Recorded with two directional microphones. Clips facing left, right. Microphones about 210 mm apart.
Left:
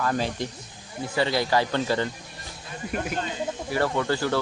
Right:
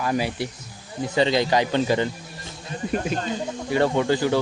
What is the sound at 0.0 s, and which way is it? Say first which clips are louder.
Speech: right 2 dB; 10° right (ahead or behind).